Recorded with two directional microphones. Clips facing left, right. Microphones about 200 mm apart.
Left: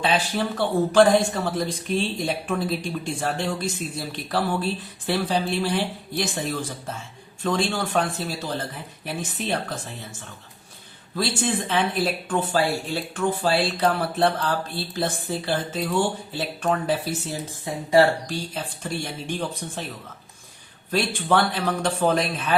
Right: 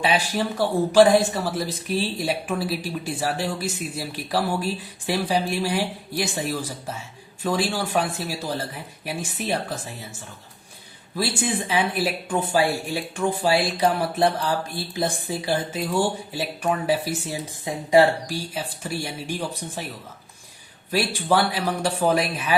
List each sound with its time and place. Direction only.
0.0 s speech: 10° right (ahead or behind)
11.2 s speech: 10° right (ahead or behind)
20.9 s speech: 10° right (ahead or behind)